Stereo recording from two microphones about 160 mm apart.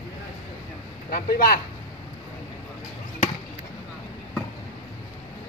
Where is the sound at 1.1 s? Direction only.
65° left (ahead or behind).